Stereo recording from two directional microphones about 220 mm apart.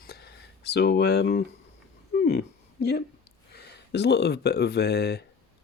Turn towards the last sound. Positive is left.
turn(degrees=50)  # may be behind; listen again after turning